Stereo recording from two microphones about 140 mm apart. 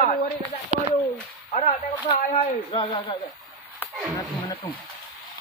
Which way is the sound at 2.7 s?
35° left (ahead or behind).